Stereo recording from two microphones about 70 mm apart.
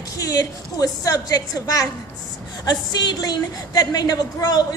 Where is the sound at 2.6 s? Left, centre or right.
Left.